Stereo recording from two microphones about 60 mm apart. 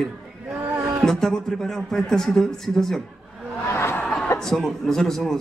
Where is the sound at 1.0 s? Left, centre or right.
Centre.